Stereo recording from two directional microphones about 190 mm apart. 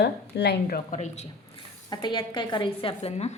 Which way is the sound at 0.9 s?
35° left (ahead or behind).